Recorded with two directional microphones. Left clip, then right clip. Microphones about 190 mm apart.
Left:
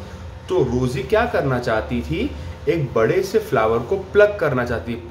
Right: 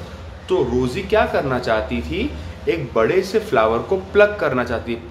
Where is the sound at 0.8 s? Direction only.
20° left (ahead or behind).